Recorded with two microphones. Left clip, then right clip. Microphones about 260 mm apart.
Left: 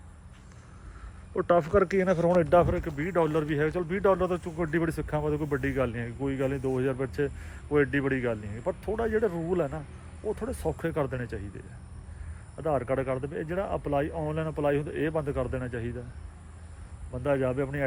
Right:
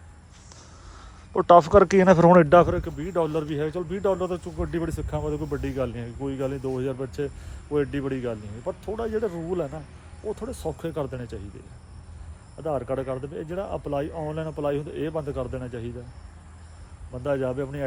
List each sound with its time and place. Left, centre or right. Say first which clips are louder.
1.4 s speech: right 8 dB; centre; by 2.6 s right
2.8 s a man's voice: right 1 dB; centre
12.5 s a man's voice: even; centre
17.2 s a man's voice: right 1 dB; centre